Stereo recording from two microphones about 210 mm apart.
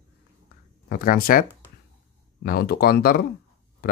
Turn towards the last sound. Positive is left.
turn(degrees=45)  # may be behind; listen again after turning